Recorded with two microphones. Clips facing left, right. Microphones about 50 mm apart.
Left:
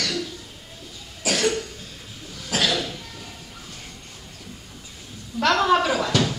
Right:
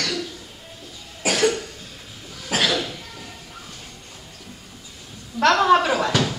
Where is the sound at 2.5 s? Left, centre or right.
Centre.